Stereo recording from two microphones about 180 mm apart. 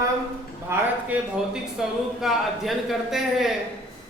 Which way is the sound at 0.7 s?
5° right (ahead or behind).